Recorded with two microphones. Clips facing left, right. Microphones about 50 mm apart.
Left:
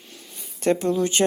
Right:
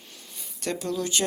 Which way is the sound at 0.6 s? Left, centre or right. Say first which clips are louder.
Left 8 dB; left.